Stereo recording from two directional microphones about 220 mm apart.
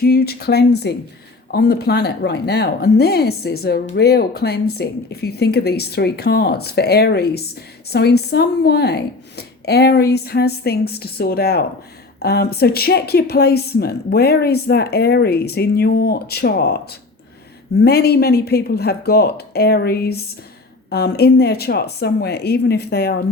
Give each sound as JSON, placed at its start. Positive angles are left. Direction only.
{"t": 0.0, "sound": "a woman's voice", "side_deg": 45}